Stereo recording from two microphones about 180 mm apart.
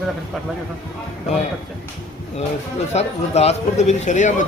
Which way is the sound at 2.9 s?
35° left (ahead or behind).